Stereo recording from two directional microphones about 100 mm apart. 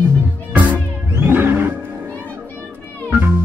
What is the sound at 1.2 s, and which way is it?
Music, 20° right (ahead or behind).